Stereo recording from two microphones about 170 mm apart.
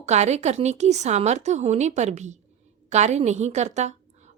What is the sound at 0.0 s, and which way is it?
A woman's voice, 40° right (ahead or behind).